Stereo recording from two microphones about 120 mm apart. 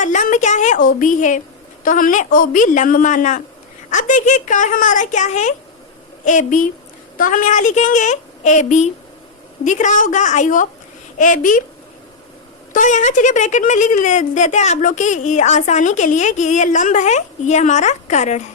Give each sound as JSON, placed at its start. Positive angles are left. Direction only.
{"t": 0.0, "sound": "a woman's voice", "side_deg": 90}
{"t": 12.7, "sound": "a woman's voice", "side_deg": 90}